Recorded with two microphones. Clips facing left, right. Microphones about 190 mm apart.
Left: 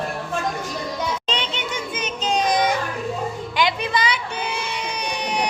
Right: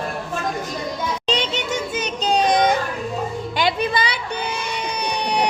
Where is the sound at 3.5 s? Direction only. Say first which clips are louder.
Right 1 dB; 30° right (ahead or behind).